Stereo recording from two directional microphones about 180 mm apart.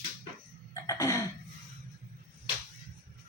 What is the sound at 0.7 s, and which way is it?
Cough, 15° left (ahead or behind).